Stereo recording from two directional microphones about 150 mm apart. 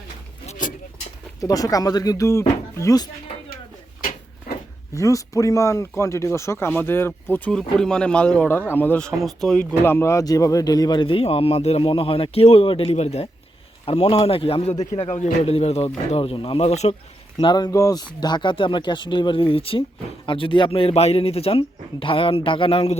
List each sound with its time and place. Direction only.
0.4 s a sound: 60° left (ahead or behind)
1.4 s speech: 25° left (ahead or behind)
4.5 s a sound: 90° left
4.9 s speech: 20° left (ahead or behind); by 9.6 s centre (ahead or behind)
9.8 s speech: 15° left (ahead or behind); by 16.9 s 45° left (ahead or behind)
17.3 s speech: 30° left (ahead or behind)